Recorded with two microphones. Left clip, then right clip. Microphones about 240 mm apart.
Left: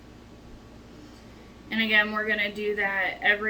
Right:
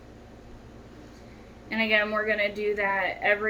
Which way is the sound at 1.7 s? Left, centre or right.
Centre.